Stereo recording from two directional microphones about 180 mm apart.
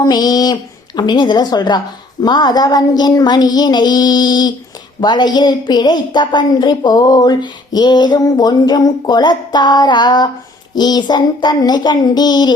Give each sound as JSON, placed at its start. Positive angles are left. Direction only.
{"t": 0.0, "sound": "a woman's voice", "side_deg": 20}